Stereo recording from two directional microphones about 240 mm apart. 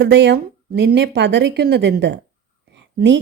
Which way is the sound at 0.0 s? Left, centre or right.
Right.